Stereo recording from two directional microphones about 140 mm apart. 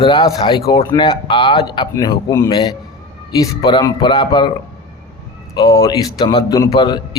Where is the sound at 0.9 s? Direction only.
35° left (ahead or behind).